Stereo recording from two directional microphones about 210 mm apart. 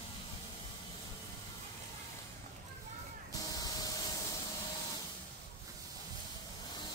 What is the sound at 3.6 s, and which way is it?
Spray, 15° left (ahead or behind).